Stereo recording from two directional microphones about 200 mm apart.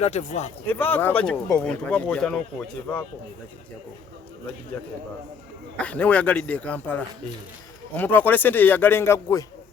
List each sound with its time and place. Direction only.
0.0 s speech: 35° left (ahead or behind)
0.7 s a man's voice: 10° left (ahead or behind)
5.7 s a man's voice: 5° left (ahead or behind)